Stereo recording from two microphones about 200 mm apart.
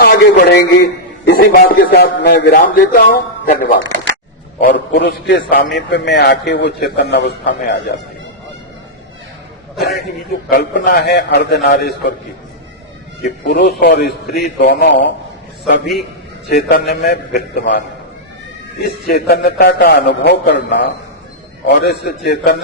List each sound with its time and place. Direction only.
0.0 s a man's voice: 50° left (ahead or behind)
2.6 s a man's voice: 45° left (ahead or behind)
4.6 s a man's voice: 55° left (ahead or behind)
10.5 s a man's voice: 50° left (ahead or behind)
13.2 s a man's voice: 55° left (ahead or behind)
18.8 s a man's voice: 50° left (ahead or behind)